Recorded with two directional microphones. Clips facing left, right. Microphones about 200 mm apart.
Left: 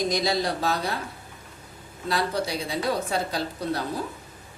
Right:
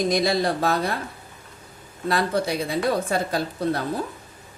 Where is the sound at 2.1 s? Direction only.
55° right (ahead or behind).